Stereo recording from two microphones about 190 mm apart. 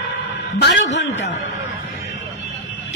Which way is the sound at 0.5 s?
65° left (ahead or behind).